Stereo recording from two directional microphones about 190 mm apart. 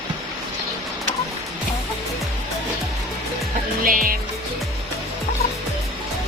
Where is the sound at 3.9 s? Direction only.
50° right (ahead or behind).